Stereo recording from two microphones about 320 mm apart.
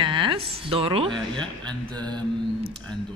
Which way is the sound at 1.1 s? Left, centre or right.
Centre.